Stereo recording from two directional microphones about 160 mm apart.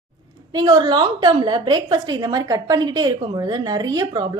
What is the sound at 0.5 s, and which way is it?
A woman's voice, 25° right (ahead or behind).